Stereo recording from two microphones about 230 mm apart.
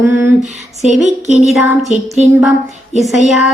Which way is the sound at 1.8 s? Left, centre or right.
Right.